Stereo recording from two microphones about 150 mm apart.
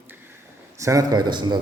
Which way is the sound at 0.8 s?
20° right (ahead or behind).